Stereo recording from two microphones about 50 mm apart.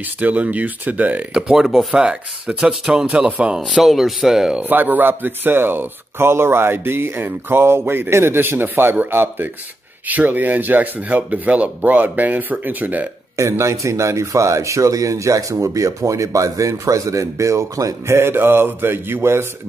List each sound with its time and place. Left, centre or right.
0.0 s speech: right
1.3 s speech: centre
2.0 s speech: centre
3.3 s speech: right
3.6 s speech: centre
4.6 s speech: right
10.0 s speech: right
13.4 s speech: right